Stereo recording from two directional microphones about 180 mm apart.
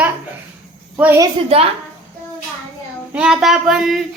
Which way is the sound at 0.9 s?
10° right (ahead or behind).